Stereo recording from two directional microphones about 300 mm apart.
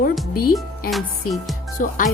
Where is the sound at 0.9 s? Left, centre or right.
Centre.